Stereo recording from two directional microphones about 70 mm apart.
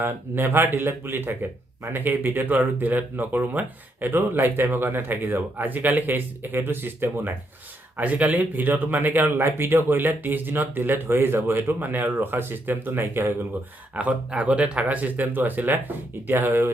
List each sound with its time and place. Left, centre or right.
0.0 s speech: right
13.9 s speech: centre